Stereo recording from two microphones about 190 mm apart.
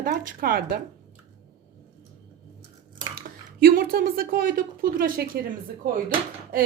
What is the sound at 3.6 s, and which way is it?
A woman's voice, 50° right (ahead or behind).